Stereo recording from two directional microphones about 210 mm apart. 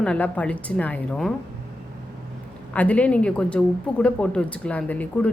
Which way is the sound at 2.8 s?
5° left (ahead or behind).